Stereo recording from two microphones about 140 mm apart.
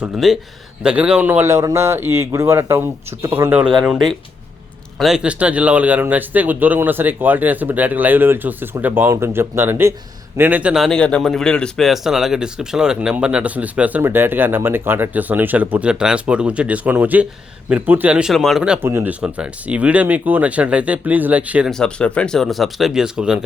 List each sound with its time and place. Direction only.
0.2 s speech: centre (ahead or behind)
18.9 s speech: 20° right (ahead or behind)
21.7 s speech: 5° left (ahead or behind)